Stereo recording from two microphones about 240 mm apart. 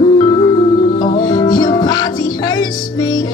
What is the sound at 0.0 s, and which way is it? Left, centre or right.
Music, left.